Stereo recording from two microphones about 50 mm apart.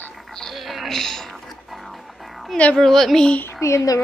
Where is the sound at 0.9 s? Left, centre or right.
Centre.